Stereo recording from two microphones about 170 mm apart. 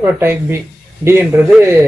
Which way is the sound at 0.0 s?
15° right (ahead or behind).